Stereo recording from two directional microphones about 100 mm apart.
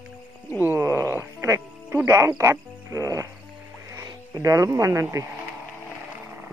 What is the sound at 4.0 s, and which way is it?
Speech, 35° right (ahead or behind).